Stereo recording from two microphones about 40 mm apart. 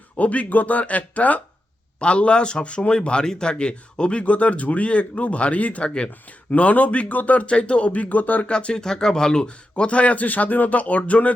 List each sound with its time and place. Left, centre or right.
0.2 s speech: left
2.0 s a man's voice: left
5.8 s a man's voice: left
6.5 s speech: left
8.4 s a man's voice: left
9.5 s speech: left